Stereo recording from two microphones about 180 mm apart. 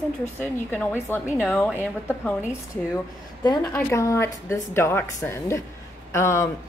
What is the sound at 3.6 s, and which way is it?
Speech, 15° left (ahead or behind).